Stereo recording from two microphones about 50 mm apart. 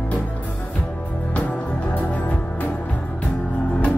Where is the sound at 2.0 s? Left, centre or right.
Left.